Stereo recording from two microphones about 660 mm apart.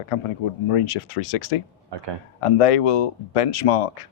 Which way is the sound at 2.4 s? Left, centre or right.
Left.